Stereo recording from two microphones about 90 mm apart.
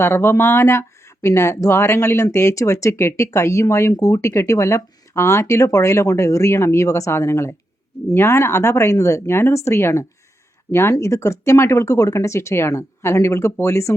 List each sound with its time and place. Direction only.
0.0 s speech: 30° left (ahead or behind)